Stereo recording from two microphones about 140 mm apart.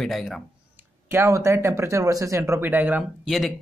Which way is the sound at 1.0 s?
20° right (ahead or behind).